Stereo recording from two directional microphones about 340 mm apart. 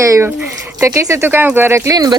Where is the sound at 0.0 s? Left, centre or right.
Centre.